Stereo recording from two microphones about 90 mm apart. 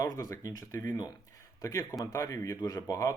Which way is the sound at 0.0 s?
40° left (ahead or behind).